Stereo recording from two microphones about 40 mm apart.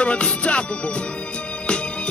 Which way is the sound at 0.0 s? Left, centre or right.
Left.